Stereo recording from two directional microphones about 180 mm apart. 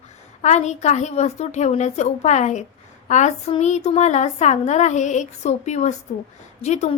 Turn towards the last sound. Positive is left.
turn(degrees=40)  # may be behind; listen again after turning